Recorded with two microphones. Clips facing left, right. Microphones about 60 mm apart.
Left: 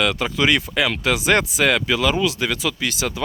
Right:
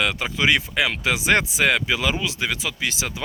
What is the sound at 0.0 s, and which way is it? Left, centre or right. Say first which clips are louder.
Speech: left 2 dB; centre.